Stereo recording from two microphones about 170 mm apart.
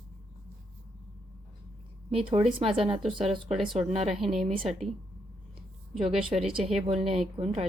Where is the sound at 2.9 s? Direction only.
Centre (ahead or behind).